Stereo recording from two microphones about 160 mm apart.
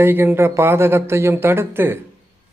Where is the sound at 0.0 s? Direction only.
15° right (ahead or behind).